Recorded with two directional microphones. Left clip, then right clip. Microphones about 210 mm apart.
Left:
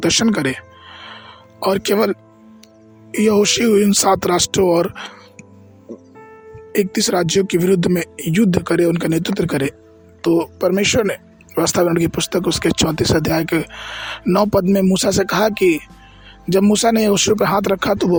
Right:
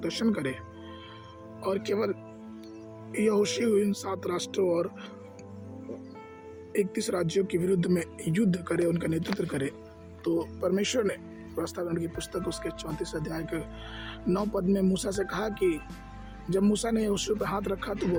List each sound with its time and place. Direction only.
0.0 s music: 45° left (ahead or behind)
1.6 s speech: 50° left (ahead or behind)
6.7 s speech: 45° left (ahead or behind)